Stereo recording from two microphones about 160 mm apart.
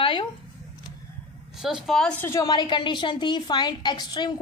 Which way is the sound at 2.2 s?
15° left (ahead or behind).